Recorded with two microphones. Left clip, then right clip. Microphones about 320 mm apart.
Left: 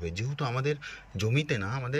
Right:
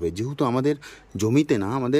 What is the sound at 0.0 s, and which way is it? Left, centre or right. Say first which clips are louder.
Speech: right 10 dB; centre.